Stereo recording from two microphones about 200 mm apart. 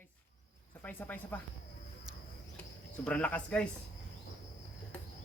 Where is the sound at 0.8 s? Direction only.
10° left (ahead or behind).